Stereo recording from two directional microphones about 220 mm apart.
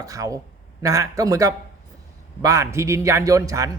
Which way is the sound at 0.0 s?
15° right (ahead or behind).